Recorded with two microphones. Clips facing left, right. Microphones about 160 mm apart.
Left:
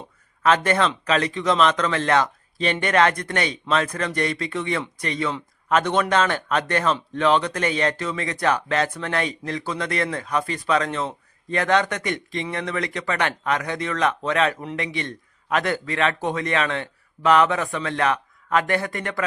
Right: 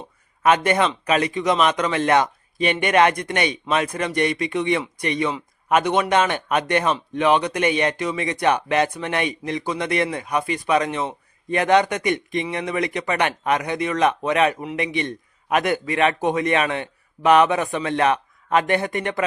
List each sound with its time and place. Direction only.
0.4 s a man's voice: 15° right (ahead or behind)